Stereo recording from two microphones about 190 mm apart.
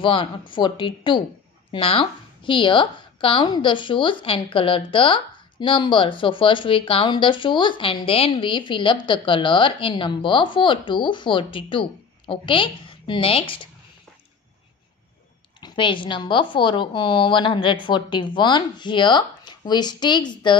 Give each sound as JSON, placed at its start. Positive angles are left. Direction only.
{"t": 0.0, "sound": "a woman's voice", "side_deg": 25}
{"t": 15.6, "sound": "a woman's voice", "side_deg": 25}